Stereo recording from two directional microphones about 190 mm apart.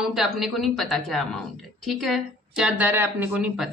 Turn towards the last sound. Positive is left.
turn(degrees=-5)  # may be behind; listen again after turning